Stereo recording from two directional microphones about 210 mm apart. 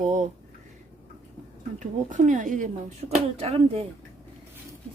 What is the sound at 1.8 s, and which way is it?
A woman's voice, 35° right (ahead or behind).